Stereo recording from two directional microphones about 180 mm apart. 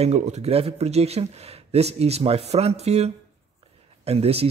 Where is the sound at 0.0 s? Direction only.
35° right (ahead or behind).